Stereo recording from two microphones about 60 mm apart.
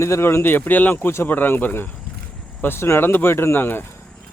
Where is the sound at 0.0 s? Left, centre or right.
Left.